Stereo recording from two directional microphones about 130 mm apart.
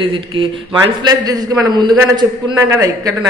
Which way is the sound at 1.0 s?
30° right (ahead or behind).